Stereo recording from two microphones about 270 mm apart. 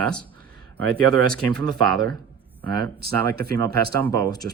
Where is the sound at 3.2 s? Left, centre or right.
Right.